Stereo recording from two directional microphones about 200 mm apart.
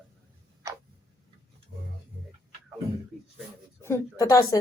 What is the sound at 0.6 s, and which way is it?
Tick-tock, 15° right (ahead or behind).